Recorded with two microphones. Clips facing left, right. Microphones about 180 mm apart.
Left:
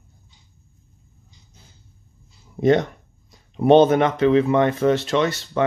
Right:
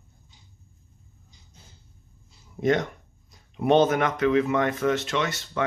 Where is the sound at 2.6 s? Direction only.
30° left (ahead or behind).